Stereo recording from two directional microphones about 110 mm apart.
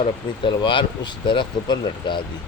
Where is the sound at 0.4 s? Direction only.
50° left (ahead or behind).